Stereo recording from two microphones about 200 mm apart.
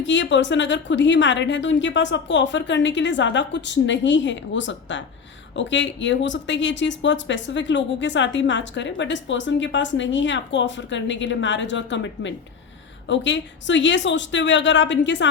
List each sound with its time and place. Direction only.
0.0 s speech: 65° left (ahead or behind)